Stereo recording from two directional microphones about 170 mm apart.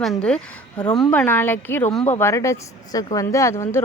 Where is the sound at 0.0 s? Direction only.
5° left (ahead or behind).